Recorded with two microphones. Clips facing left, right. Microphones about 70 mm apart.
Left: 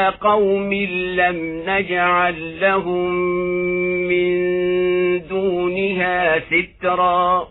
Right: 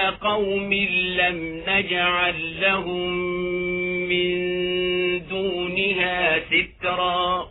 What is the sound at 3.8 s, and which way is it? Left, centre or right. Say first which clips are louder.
Music: left 6 dB; left.